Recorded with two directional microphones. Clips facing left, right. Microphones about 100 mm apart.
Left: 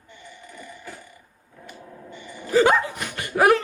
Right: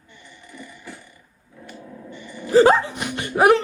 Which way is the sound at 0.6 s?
15° left (ahead or behind).